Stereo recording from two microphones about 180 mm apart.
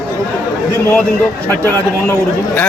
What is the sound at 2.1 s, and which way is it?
Speech, 10° left (ahead or behind).